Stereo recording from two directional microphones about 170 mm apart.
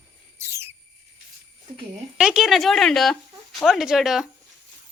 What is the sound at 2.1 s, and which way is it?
Speech, 5° right (ahead or behind).